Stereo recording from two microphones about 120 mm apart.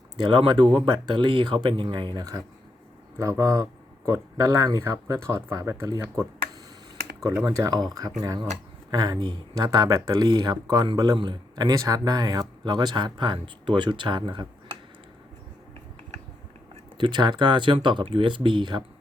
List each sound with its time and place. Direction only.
0.2 s speech: 40° right (ahead or behind)
7.4 s speech: 30° right (ahead or behind)
17.0 s speech: 40° right (ahead or behind)